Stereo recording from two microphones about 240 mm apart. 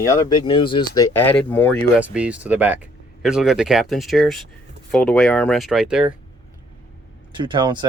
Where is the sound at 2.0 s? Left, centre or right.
Centre.